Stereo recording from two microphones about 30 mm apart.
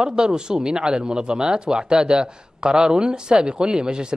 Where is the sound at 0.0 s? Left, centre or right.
Right.